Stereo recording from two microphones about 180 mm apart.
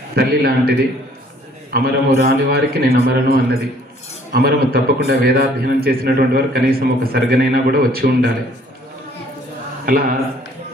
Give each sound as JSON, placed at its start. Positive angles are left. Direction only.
{"t": 0.1, "sound": "a man's voice", "side_deg": -60}
{"t": 9.8, "sound": "speech", "side_deg": -50}